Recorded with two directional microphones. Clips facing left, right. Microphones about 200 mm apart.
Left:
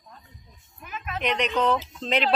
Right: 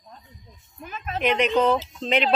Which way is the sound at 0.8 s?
35° right (ahead or behind).